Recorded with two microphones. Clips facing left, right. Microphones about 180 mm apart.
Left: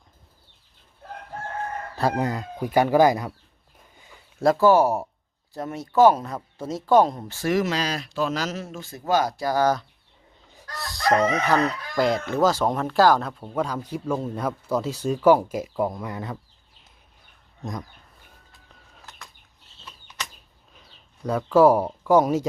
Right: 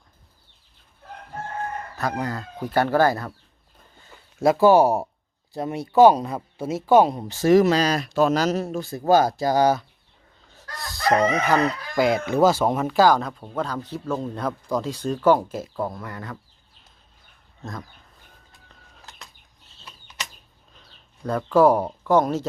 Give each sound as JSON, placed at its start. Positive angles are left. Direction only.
{"t": 2.0, "sound": "speech", "side_deg": 25}
{"t": 4.5, "sound": "speech", "side_deg": -20}
{"t": 10.8, "sound": "chicken", "side_deg": 0}
{"t": 12.2, "sound": "speech", "side_deg": -10}
{"t": 17.6, "sound": "speech", "side_deg": 15}
{"t": 21.2, "sound": "speech", "side_deg": 5}